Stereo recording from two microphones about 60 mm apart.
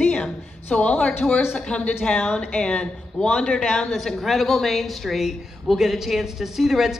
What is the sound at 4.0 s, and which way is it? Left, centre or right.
Speech, centre.